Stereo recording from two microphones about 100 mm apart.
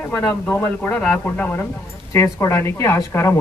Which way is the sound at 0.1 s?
30° left (ahead or behind).